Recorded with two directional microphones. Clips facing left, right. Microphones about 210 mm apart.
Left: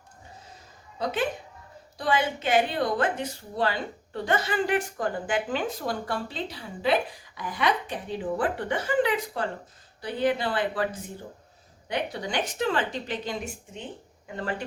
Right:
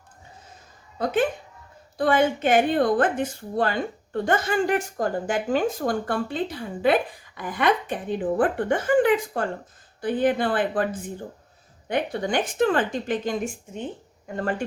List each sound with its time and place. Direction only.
0.9 s a woman's voice: 50° right (ahead or behind)
11.9 s a woman's voice: 50° right (ahead or behind)